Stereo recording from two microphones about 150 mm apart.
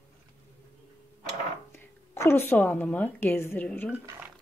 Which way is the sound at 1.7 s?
15° left (ahead or behind).